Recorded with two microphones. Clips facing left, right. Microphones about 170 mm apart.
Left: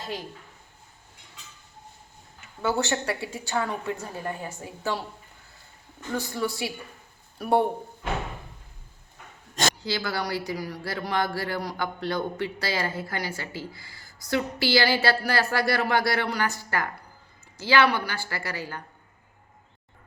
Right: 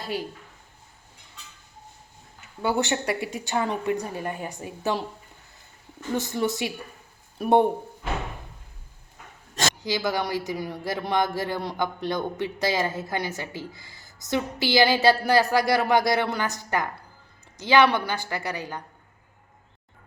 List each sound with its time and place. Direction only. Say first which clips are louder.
0.0 s a woman's voice: right 4 dB; 10° right (ahead or behind)
2.6 s a woman's voice: right 1 dB; 15° right (ahead or behind)
6.1 s speech: right 3 dB; 20° right (ahead or behind)
9.8 s speech: right 3 dB; 15° right (ahead or behind)